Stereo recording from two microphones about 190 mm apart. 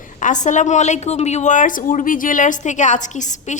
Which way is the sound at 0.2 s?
40° left (ahead or behind).